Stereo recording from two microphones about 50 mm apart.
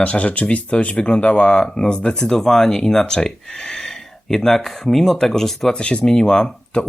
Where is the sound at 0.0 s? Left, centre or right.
Left; by 5.7 s centre.